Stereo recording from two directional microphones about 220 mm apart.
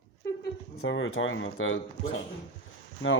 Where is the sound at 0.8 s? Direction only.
60° left (ahead or behind).